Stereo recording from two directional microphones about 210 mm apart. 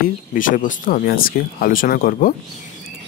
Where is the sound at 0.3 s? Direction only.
40° left (ahead or behind).